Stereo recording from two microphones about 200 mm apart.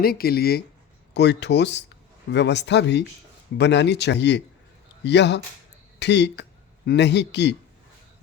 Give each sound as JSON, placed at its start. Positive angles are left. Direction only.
{"t": 0.0, "sound": "speech", "side_deg": 50}